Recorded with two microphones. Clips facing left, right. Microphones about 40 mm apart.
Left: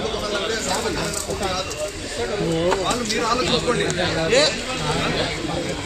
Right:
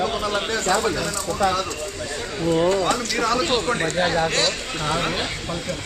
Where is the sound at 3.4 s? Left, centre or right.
Centre.